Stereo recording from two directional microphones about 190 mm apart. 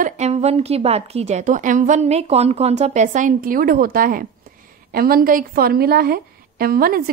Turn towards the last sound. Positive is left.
turn(degrees=-50)  # may be behind; listen again after turning